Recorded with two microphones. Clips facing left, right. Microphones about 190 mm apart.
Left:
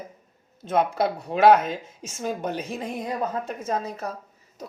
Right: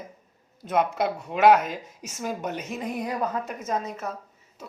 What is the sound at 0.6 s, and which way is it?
Speech, 30° left (ahead or behind).